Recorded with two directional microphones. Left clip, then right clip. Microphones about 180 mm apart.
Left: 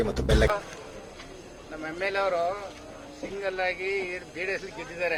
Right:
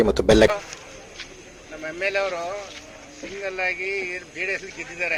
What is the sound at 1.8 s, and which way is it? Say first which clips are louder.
Speech: right 3 dB; centre (ahead or behind).